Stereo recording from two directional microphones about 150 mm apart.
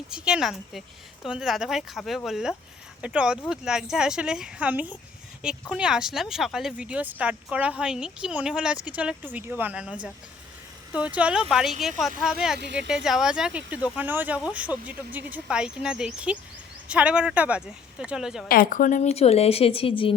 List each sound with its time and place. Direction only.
0.1 s speech: 5° right (ahead or behind)
18.4 s a woman's voice: 70° left (ahead or behind); by 20.1 s 35° left (ahead or behind)